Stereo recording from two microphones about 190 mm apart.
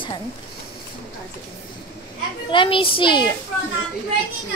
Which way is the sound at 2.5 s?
25° left (ahead or behind).